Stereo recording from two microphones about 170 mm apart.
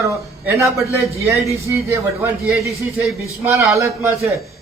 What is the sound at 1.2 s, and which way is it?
A man's voice, 15° right (ahead or behind).